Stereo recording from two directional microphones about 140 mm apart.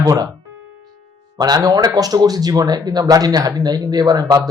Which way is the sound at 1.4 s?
30° right (ahead or behind).